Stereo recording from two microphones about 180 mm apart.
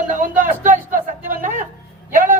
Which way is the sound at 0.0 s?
45° right (ahead or behind).